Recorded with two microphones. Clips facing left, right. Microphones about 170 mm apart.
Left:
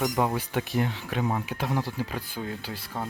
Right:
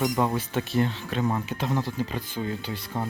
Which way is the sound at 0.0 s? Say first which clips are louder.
Right 1 dB; 10° left (ahead or behind).